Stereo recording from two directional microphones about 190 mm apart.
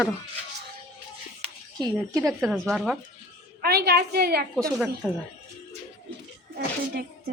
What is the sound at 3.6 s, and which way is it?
Speech, 55° right (ahead or behind).